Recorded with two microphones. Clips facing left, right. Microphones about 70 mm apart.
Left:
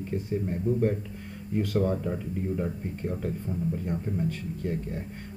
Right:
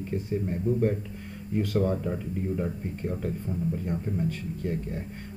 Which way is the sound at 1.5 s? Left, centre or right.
Centre.